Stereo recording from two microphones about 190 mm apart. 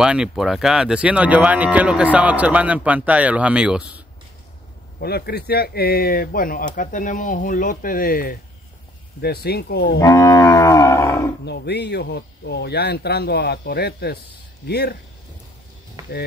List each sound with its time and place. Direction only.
0.0 s speech: 5° right (ahead or behind)
5.0 s speech: 55° left (ahead or behind)
9.9 s livestock: 15° left (ahead or behind)
11.4 s speech: 60° left (ahead or behind)
16.0 s music: 20° right (ahead or behind)